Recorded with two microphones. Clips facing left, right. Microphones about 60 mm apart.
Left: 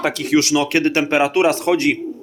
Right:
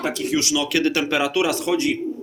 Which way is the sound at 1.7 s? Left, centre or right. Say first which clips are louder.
Left 4 dB; left.